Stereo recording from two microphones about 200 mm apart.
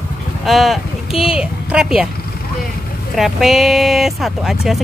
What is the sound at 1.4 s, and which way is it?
Speech, 5° right (ahead or behind).